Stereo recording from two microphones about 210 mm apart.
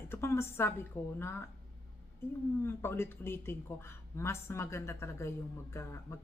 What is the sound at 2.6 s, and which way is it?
Speech, 10° left (ahead or behind).